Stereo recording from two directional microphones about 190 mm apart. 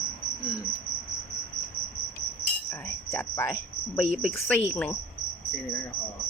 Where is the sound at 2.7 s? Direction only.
10° left (ahead or behind).